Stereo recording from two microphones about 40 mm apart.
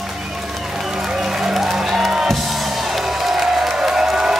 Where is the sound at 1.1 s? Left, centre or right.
Centre.